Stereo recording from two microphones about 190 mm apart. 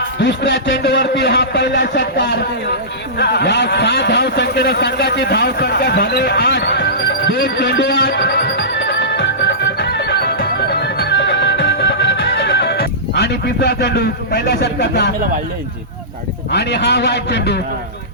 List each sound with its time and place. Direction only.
0.2 s a sound: 75° left (ahead or behind); by 2.4 s 55° left (ahead or behind)
3.2 s vehicle: 60° left (ahead or behind)
16.5 s a man's voice: 65° left (ahead or behind)